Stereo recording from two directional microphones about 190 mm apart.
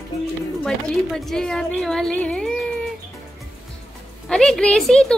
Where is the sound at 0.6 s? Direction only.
5° left (ahead or behind).